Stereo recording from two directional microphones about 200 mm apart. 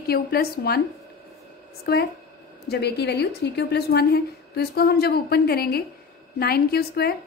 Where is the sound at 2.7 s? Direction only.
55° left (ahead or behind).